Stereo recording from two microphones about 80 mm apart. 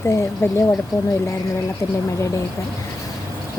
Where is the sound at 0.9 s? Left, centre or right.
Left.